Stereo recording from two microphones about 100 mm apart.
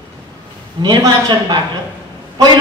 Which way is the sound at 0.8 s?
45° right (ahead or behind).